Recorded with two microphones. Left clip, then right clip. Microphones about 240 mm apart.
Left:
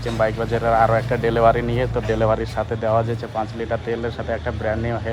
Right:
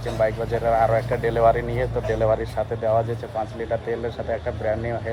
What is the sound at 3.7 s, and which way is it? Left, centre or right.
Speech, centre.